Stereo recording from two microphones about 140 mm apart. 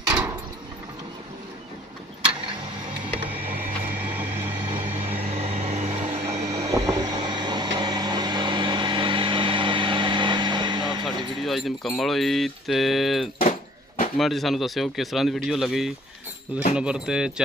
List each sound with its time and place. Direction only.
3.3 s printer: 15° right (ahead or behind)
4.8 s vehicle: 15° right (ahead or behind)
5.3 s a sound: 45° right (ahead or behind)
6.2 s vehicle: 25° right (ahead or behind)
11.4 s speech: centre (ahead or behind)
13.4 s a sound: 75° left (ahead or behind)
14.1 s speech: centre (ahead or behind)